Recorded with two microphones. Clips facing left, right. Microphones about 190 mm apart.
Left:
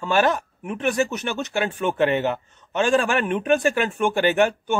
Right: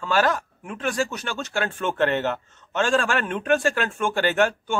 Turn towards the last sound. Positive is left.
turn(degrees=15)  # may be behind; listen again after turning